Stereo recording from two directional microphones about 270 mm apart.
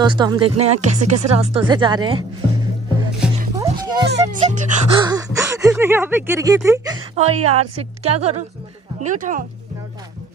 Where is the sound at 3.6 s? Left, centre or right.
Centre.